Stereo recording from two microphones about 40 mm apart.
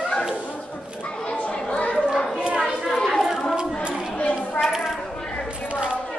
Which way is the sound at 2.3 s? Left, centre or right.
Right.